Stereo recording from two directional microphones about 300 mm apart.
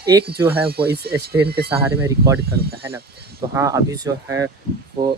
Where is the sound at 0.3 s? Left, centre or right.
Centre.